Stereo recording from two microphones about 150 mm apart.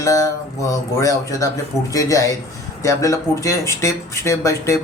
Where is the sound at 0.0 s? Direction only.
20° left (ahead or behind).